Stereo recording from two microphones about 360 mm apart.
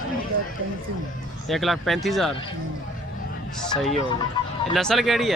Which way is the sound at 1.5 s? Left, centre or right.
Centre.